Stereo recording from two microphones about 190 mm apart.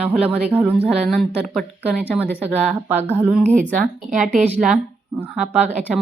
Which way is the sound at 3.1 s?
10° right (ahead or behind).